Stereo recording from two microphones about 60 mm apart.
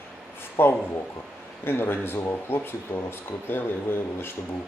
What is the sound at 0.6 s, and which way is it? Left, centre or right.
Speech, left.